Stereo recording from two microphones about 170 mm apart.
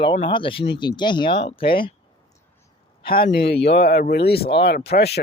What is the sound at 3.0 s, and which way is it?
A man's voice, 60° left (ahead or behind).